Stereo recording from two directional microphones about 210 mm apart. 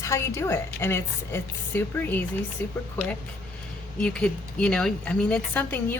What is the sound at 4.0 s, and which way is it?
A woman's voice, 5° left (ahead or behind).